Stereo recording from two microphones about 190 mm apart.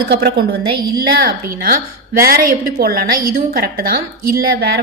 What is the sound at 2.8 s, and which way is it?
A woman's voice, 55° right (ahead or behind).